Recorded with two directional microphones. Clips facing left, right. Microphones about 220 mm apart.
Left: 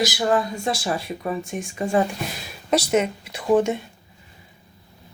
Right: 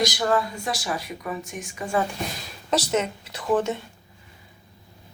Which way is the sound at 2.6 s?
10° left (ahead or behind).